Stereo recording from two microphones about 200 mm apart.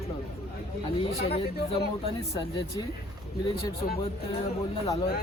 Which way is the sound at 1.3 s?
30° left (ahead or behind).